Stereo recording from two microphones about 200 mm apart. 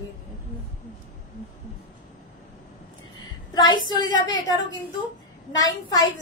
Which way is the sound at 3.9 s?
20° left (ahead or behind).